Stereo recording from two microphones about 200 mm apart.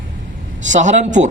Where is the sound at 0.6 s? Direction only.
35° right (ahead or behind).